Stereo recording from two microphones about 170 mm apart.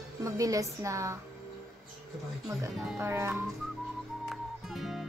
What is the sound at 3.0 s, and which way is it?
Speech, 15° right (ahead or behind).